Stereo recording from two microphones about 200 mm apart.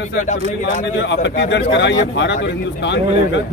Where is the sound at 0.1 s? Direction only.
40° left (ahead or behind).